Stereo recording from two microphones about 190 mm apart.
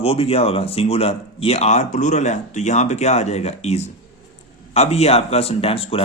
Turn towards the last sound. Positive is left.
turn(degrees=30)  # may be behind; listen again after turning